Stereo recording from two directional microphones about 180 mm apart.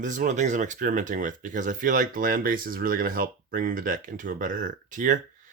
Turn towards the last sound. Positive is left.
turn(degrees=-45)  # may be behind; listen again after turning